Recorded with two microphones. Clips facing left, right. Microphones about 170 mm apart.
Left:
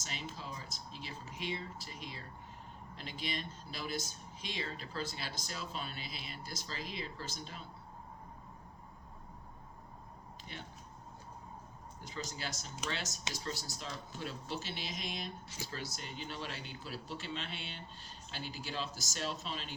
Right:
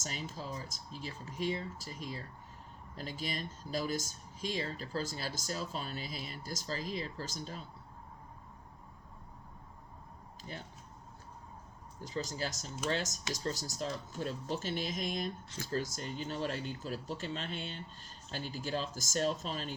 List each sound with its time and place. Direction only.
0.0 s speech: 45° right (ahead or behind)
11.9 s speech: 40° right (ahead or behind)